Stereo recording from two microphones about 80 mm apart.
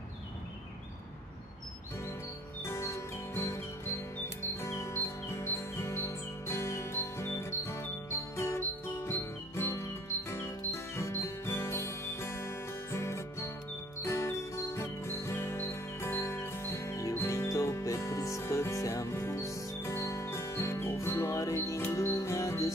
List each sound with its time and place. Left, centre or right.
2.6 s music: left